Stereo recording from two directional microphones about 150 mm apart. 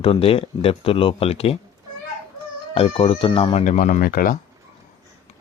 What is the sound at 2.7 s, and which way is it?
Speech, 40° left (ahead or behind).